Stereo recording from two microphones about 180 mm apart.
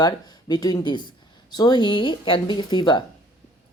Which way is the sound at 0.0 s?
20° left (ahead or behind).